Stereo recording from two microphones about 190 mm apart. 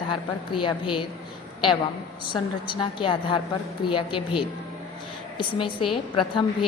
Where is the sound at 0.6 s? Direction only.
25° left (ahead or behind).